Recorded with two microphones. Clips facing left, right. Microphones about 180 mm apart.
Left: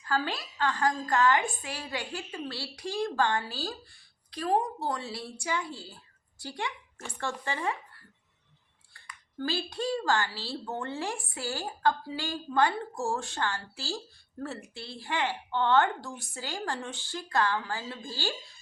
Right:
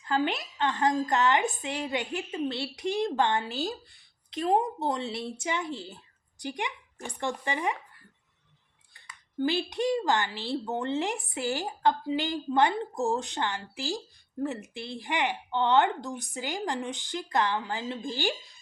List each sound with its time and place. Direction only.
0.0 s a woman's voice: 20° right (ahead or behind)
8.9 s a woman's voice: 20° right (ahead or behind)